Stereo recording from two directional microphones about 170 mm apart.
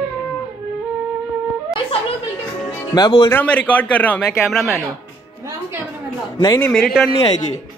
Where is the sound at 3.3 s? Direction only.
10° left (ahead or behind).